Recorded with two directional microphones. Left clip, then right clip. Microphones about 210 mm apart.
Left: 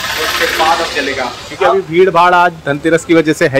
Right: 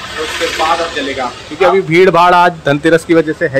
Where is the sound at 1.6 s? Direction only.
25° right (ahead or behind); by 3.3 s 5° right (ahead or behind).